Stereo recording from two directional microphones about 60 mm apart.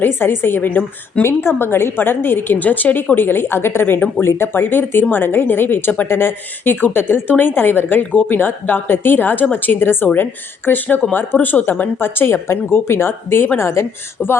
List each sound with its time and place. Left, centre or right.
0.0 s a woman's voice: left
1.2 s a woman's voice: left